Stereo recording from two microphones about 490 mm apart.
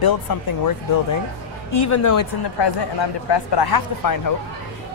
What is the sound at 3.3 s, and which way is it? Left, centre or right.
Speech, left.